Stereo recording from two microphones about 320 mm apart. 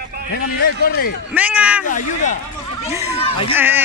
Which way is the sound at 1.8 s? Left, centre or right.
Left.